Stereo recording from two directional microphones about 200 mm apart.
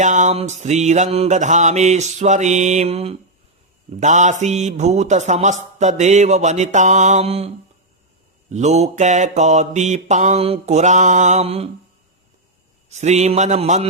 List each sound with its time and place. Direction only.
0.0 s mantra: 35° right (ahead or behind)
12.9 s mantra: 35° right (ahead or behind)